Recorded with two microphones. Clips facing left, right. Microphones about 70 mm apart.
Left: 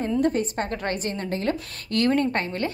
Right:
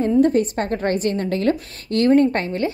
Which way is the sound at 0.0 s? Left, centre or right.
Right.